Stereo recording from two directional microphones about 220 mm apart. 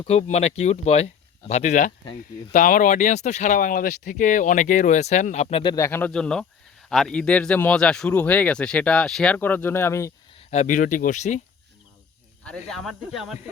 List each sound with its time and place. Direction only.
0.0 s speech: 30° left (ahead or behind); by 10.1 s 10° left (ahead or behind)
10.5 s speech: 35° left (ahead or behind)
12.5 s speech: centre (ahead or behind)